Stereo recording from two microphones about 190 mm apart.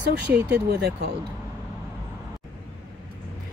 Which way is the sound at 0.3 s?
55° right (ahead or behind).